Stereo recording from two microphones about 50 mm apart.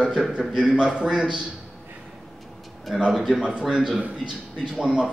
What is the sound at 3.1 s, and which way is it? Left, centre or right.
Speech, centre.